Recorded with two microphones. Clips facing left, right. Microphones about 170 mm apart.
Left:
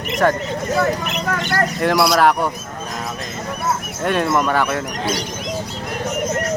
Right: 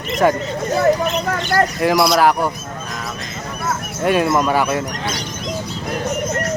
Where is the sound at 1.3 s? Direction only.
30° right (ahead or behind).